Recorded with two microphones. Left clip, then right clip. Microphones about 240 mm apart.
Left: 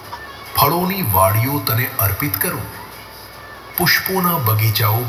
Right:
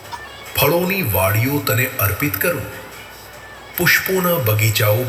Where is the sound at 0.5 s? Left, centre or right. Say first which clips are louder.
Even; left.